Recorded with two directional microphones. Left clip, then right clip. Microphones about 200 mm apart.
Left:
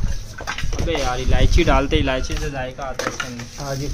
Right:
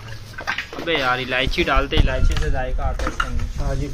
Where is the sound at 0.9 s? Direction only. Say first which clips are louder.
Right 3 dB; 10° left (ahead or behind).